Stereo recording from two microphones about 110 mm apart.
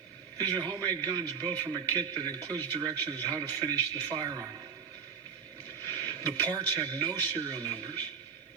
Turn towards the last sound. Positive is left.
turn(degrees=-40)  # may be behind; listen again after turning